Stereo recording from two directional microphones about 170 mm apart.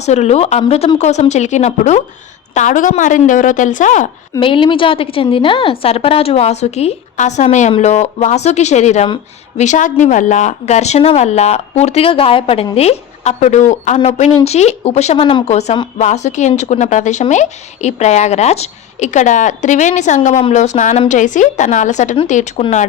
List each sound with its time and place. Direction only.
0.0 s a woman's voice: 40° left (ahead or behind)
4.4 s a woman's voice: 30° left (ahead or behind); by 22.6 s 45° left (ahead or behind)